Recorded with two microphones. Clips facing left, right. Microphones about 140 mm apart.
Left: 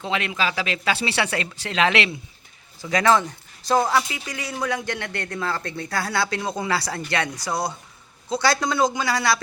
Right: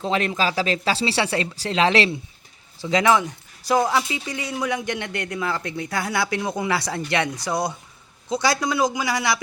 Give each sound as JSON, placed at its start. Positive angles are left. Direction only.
{"t": 0.0, "sound": "speech", "side_deg": -35}
{"t": 2.9, "sound": "a man's voice", "side_deg": -15}